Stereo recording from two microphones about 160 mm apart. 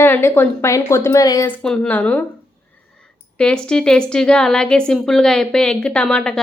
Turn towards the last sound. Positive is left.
turn(degrees=5)  # may be behind; listen again after turning